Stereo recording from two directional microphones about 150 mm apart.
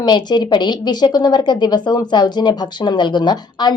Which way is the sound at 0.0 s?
30° left (ahead or behind).